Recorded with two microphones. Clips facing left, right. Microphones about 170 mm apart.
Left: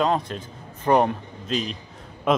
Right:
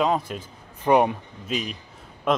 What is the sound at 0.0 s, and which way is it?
A man's voice, 5° right (ahead or behind).